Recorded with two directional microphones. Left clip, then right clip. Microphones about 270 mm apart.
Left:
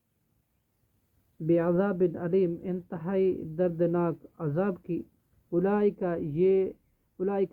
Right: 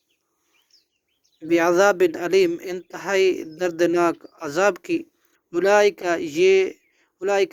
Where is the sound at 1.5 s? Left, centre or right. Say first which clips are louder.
Right 9 dB; right.